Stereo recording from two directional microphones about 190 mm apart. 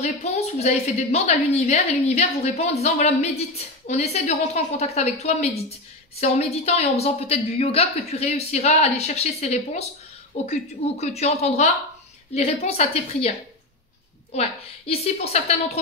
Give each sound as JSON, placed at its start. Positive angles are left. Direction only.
{"t": 0.0, "sound": "a woman's voice", "side_deg": 35}
{"t": 14.3, "sound": "a woman's voice", "side_deg": 35}